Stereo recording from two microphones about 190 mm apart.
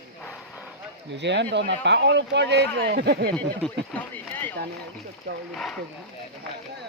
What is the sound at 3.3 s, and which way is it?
Speech, 10° left (ahead or behind).